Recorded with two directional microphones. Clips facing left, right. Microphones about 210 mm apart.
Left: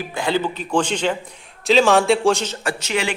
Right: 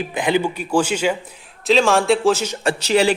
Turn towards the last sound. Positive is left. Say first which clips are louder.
# right 7 dB
turn(degrees=-35)  # may be behind; listen again after turning